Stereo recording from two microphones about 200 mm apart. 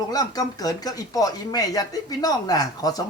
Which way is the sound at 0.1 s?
20° left (ahead or behind).